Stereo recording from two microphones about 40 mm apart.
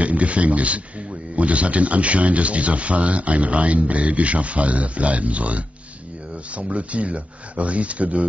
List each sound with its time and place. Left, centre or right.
0.0 s speech: right